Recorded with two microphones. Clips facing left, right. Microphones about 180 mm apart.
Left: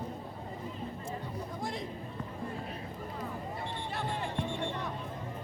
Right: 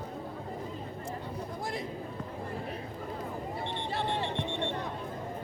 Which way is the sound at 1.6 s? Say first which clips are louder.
Right 1 dB; 5° right (ahead or behind).